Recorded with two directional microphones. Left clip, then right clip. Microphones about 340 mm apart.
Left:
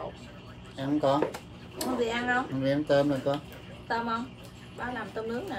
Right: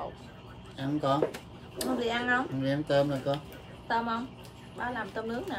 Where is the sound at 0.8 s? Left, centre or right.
Centre.